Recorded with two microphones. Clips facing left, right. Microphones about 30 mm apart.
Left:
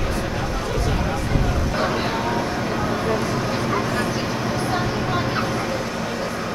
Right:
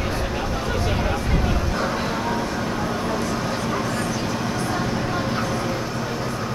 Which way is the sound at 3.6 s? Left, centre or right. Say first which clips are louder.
Left 2 dB; centre.